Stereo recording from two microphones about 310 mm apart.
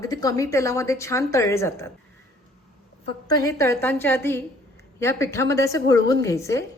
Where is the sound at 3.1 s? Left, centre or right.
Centre.